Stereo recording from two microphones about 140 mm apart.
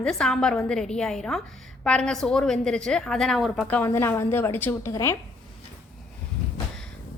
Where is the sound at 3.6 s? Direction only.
15° left (ahead or behind).